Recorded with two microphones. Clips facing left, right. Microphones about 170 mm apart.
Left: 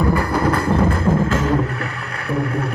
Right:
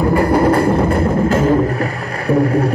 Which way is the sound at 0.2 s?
30° right (ahead or behind).